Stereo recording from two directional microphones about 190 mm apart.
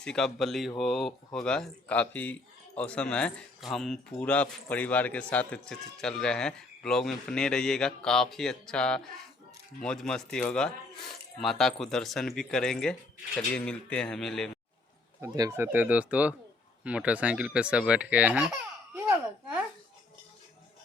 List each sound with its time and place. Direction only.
0.0 s speech: 5° left (ahead or behind)
15.2 s speech: 15° right (ahead or behind)
18.9 s a sound: 10° right (ahead or behind)